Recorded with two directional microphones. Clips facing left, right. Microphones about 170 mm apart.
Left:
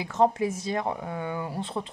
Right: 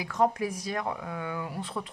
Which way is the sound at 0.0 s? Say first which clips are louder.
Left 3 dB; 25° left (ahead or behind).